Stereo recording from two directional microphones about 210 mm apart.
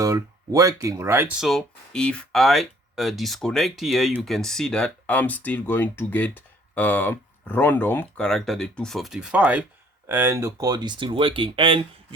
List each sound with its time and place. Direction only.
0.0 s speech: 15° right (ahead or behind)
1.4 s speech: centre (ahead or behind); by 11.8 s 25° right (ahead or behind)